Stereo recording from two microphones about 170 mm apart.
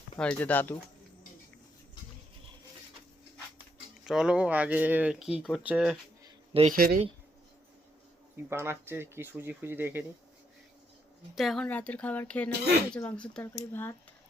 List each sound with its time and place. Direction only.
0.2 s speech: 5° left (ahead or behind)
4.0 s speech: 5° right (ahead or behind)
6.5 s speech: 35° right (ahead or behind)
6.7 s speech: 60° right (ahead or behind)
8.4 s speech: 15° right (ahead or behind)
11.3 s speech: centre (ahead or behind)